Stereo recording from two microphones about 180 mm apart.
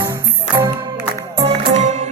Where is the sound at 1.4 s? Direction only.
40° right (ahead or behind).